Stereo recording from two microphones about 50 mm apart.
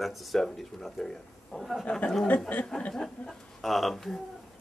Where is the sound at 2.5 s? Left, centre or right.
Left.